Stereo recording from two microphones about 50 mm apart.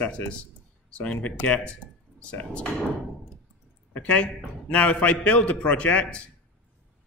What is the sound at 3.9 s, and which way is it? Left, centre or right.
A man's voice, left.